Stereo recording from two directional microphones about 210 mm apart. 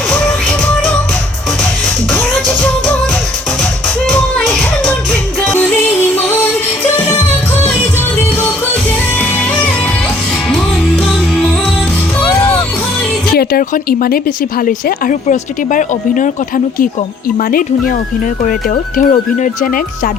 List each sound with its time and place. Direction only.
0.1 s music: 5° left (ahead or behind)
2.1 s music: 5° left (ahead or behind)
4.1 s music: 5° left (ahead or behind)
10.5 s music: 5° left (ahead or behind)
13.3 s speech: 45° left (ahead or behind)
17.3 s speech: 40° left (ahead or behind)